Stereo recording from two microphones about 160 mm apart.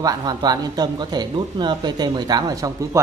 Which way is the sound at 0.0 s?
25° right (ahead or behind).